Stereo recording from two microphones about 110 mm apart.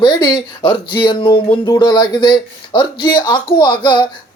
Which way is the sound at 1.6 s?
35° left (ahead or behind).